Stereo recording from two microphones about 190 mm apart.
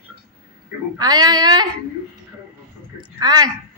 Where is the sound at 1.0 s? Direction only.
20° right (ahead or behind).